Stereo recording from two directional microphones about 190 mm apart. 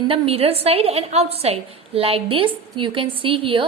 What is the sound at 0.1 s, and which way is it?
A woman's voice, 30° right (ahead or behind).